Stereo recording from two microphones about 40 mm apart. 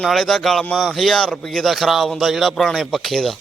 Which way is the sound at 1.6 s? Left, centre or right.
Centre.